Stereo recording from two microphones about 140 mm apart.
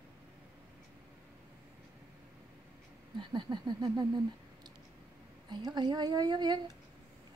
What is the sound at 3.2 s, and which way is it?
A woman's voice, 30° right (ahead or behind).